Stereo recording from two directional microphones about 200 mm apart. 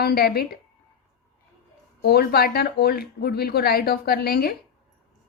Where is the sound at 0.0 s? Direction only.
50° left (ahead or behind).